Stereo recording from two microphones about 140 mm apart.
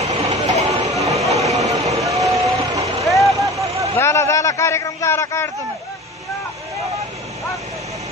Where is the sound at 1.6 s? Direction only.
50° right (ahead or behind).